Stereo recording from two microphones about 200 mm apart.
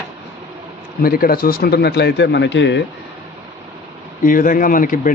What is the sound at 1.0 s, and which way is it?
A man's voice, 45° left (ahead or behind).